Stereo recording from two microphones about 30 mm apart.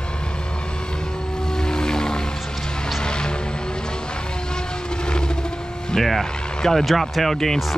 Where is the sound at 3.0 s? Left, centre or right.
Left.